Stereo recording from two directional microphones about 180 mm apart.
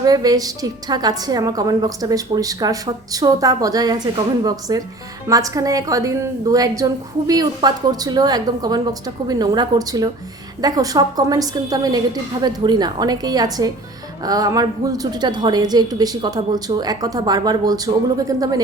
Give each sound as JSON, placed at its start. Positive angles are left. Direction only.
{"t": 0.0, "sound": "a woman's voice", "side_deg": -20}